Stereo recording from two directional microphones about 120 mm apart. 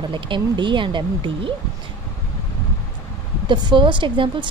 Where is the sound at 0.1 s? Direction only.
40° right (ahead or behind).